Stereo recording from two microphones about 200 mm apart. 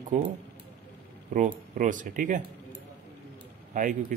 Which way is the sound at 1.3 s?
40° right (ahead or behind).